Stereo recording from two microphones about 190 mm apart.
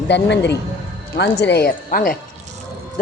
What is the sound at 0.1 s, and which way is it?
A woman's voice, 65° left (ahead or behind).